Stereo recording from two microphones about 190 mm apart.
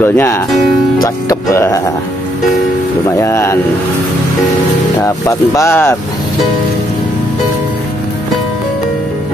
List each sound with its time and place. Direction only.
0.0 s speech: 10° left (ahead or behind)
3.2 s speech: 15° left (ahead or behind)
5.0 s speech: 15° left (ahead or behind)